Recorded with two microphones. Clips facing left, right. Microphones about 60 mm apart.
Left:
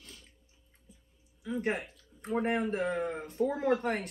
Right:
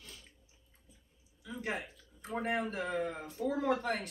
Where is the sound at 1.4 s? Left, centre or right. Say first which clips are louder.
Left 6 dB; left.